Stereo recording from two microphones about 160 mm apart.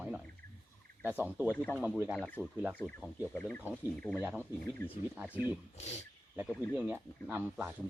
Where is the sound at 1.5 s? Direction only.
10° left (ahead or behind).